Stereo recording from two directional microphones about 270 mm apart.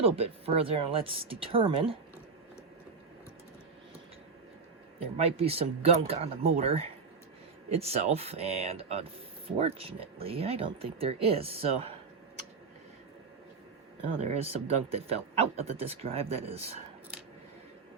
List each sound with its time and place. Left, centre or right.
0.0 s speech: right
5.1 s speech: right
14.2 s speech: right